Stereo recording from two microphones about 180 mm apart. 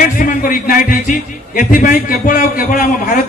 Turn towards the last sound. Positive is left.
turn(degrees=50)  # may be behind; listen again after turning